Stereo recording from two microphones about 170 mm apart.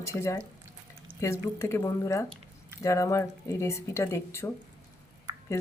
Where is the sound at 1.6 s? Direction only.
15° left (ahead or behind).